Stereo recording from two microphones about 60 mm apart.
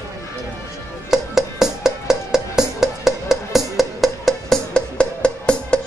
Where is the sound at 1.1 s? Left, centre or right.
Centre.